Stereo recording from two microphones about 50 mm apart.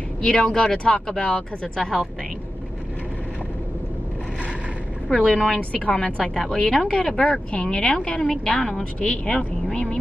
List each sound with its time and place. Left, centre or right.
0.2 s speech: centre
5.1 s speech: centre